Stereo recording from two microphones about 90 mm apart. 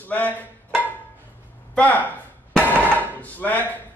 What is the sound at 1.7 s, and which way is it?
Speech, 20° left (ahead or behind).